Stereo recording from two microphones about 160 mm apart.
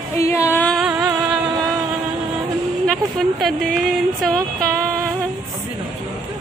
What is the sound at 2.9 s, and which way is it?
Speech, centre (ahead or behind).